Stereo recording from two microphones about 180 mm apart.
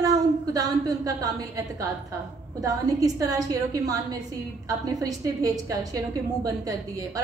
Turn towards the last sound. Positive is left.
turn(degrees=-20)  # may be behind; listen again after turning